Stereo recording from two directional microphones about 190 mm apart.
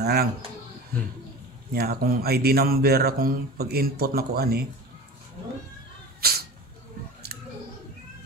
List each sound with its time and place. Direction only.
0.0 s speech: 55° right (ahead or behind)
1.7 s speech: 55° right (ahead or behind)
6.2 s cat: 55° right (ahead or behind)
7.3 s clicking: 55° right (ahead or behind)